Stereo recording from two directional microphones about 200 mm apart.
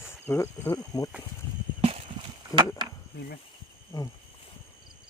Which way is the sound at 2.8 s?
20° right (ahead or behind).